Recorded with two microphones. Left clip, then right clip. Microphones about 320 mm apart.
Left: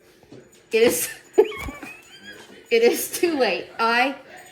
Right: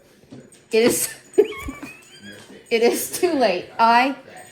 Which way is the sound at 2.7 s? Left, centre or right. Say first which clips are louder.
Even; centre.